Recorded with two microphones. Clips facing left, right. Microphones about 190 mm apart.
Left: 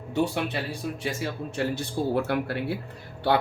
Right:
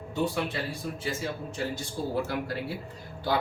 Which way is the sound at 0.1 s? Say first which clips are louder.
Left 3 dB; 70° left (ahead or behind).